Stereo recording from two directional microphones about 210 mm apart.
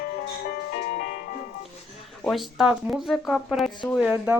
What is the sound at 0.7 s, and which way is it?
Music, 45° left (ahead or behind).